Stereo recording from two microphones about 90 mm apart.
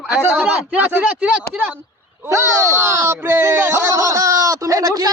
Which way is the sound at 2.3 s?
35° right (ahead or behind).